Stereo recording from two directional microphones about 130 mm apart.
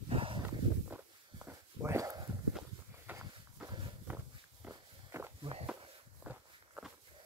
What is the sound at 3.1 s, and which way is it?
Walk, 15° right (ahead or behind).